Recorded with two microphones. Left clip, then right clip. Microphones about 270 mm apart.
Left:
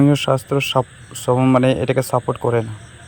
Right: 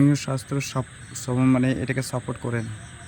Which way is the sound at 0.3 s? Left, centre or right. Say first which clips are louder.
Left 12 dB; left.